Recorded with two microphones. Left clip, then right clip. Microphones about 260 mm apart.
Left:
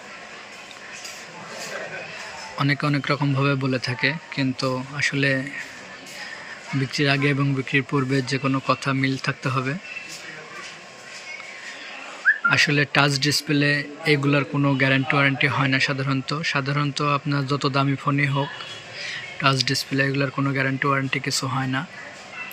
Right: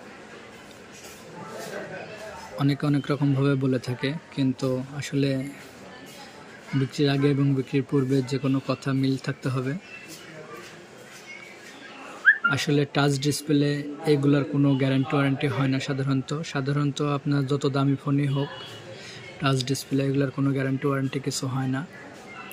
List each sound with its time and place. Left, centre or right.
2.6 s speech: centre
6.9 s speech: centre
12.5 s speech: centre
19.0 s speech: centre
21.4 s speech: left